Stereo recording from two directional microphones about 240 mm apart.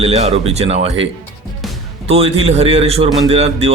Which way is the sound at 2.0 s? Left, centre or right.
Right.